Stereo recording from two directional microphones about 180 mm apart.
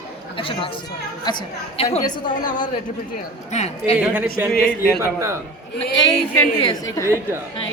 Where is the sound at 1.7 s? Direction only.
35° left (ahead or behind).